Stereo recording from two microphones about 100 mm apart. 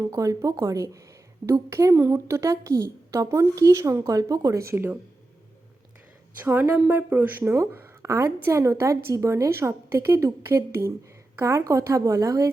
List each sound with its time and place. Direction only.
0.1 s a woman's voice: 35° right (ahead or behind)
6.4 s a woman's voice: 20° right (ahead or behind); by 12.5 s 35° right (ahead or behind)